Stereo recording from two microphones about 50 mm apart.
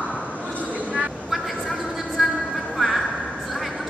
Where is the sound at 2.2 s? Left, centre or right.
Centre.